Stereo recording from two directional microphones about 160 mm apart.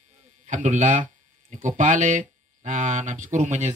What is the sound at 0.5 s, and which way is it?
Speech, 50° right (ahead or behind).